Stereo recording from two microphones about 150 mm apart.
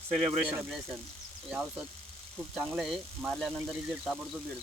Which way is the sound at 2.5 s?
10° right (ahead or behind).